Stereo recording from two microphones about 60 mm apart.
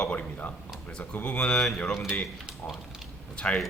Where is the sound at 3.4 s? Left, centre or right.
Centre.